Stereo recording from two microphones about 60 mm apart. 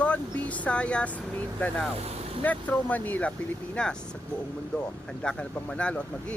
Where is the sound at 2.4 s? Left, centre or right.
Left.